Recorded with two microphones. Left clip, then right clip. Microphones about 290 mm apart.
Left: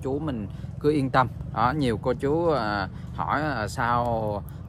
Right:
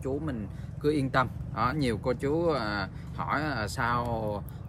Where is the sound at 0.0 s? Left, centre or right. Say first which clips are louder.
Left 4 dB; centre.